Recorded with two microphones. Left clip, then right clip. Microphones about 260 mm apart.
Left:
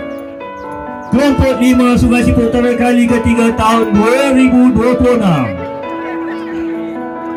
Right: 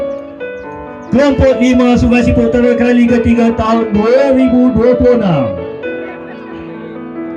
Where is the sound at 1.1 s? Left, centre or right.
Left.